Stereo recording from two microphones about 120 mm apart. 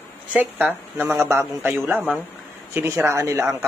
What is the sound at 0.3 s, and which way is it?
Speech, 10° right (ahead or behind).